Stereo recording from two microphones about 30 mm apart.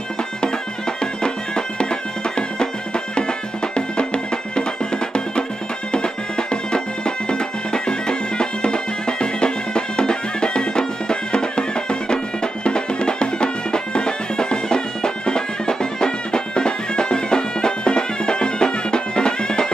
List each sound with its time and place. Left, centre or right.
1.2 s music: left